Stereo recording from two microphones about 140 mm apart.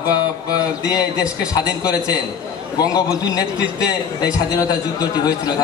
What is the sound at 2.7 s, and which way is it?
A man's voice, 25° left (ahead or behind).